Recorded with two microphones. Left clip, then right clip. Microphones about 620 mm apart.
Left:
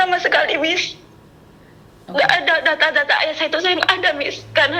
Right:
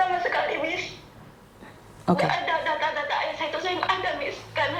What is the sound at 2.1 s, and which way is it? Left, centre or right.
A woman's voice, left.